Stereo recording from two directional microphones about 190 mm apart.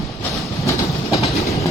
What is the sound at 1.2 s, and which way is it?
Train, 35° left (ahead or behind).